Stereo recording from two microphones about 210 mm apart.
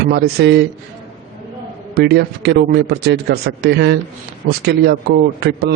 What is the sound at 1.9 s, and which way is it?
A man's voice, 50° right (ahead or behind).